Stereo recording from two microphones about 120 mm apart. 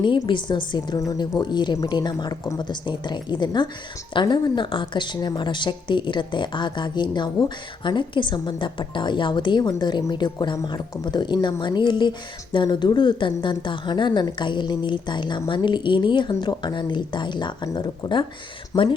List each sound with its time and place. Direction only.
0.0 s speech: 40° left (ahead or behind)